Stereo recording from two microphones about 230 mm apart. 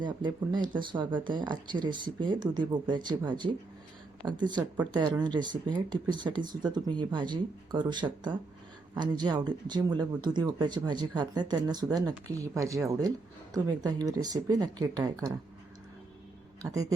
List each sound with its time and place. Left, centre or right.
0.0 s speech: centre
16.6 s speech: centre